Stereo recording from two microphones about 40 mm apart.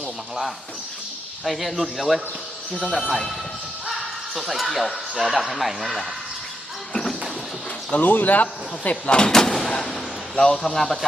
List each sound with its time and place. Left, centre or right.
1.5 s speech: centre
6.9 s a sound: centre
7.9 s speech: left
9.0 s speech: left
9.3 s artillery fire: centre
10.3 s a man's voice: centre